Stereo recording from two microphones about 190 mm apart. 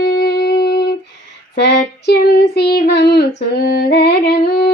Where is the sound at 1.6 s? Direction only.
60° left (ahead or behind).